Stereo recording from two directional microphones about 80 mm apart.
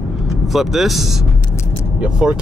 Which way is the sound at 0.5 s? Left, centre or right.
Centre.